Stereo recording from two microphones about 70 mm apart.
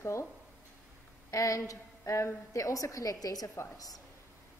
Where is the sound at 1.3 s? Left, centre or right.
Left.